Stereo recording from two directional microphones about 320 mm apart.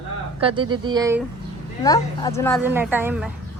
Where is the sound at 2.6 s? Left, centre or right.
Centre.